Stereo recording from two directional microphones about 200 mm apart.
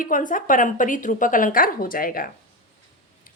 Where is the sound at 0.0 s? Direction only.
40° left (ahead or behind).